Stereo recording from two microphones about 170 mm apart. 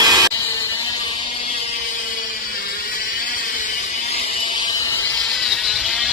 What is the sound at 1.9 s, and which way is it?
Vehicle, 55° left (ahead or behind).